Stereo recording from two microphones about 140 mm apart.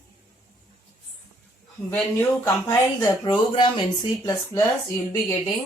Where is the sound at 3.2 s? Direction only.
35° left (ahead or behind).